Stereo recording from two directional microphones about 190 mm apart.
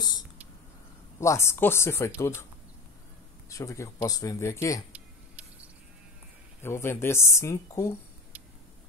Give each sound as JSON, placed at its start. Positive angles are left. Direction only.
{"t": 1.2, "sound": "speech", "side_deg": 15}
{"t": 3.4, "sound": "speech", "side_deg": 15}
{"t": 4.9, "sound": "a sound", "side_deg": -5}
{"t": 6.6, "sound": "speech", "side_deg": 10}